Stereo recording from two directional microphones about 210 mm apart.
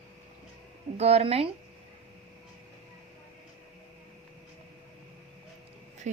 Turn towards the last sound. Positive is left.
turn(degrees=-35)  # may be behind; listen again after turning